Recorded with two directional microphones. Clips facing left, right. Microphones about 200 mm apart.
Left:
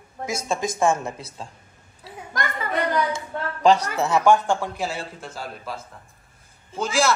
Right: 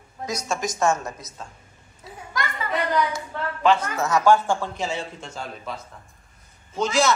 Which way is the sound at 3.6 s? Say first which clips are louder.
Left 2 dB; 40° left (ahead or behind).